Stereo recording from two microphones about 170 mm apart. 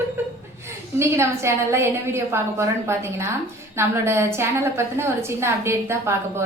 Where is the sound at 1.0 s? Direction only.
15° right (ahead or behind).